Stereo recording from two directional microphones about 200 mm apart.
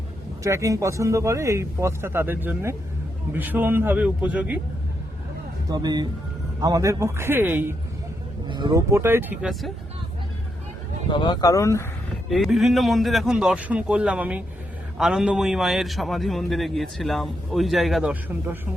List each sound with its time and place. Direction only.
0.4 s speech: 15° right (ahead or behind)
5.6 s speech: 20° right (ahead or behind)
8.4 s speech: 25° right (ahead or behind); by 9.7 s centre (ahead or behind)
11.1 s speech: 20° left (ahead or behind)
12.3 s a man's voice: centre (ahead or behind)